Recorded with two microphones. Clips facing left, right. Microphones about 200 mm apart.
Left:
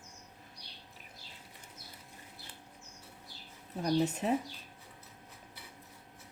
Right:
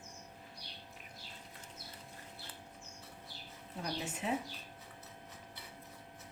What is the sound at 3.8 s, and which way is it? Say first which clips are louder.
Speech: left 10 dB; 40° left (ahead or behind).